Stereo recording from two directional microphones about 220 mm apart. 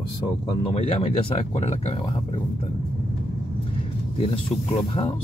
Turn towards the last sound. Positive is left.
turn(degrees=25)  # may be behind; listen again after turning